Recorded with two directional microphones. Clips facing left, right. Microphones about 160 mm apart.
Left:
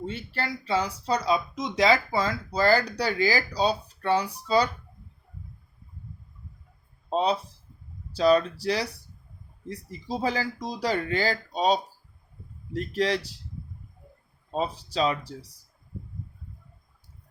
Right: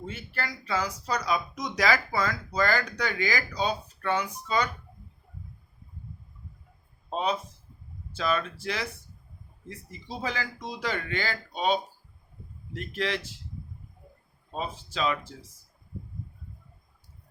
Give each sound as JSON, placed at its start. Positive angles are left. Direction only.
{"t": 0.0, "sound": "speech", "side_deg": 30}
{"t": 7.1, "sound": "speech", "side_deg": 35}
{"t": 14.5, "sound": "speech", "side_deg": 35}